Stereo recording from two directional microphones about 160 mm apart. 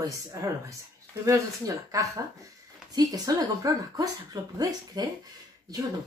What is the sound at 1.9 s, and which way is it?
A woman's voice, 20° right (ahead or behind).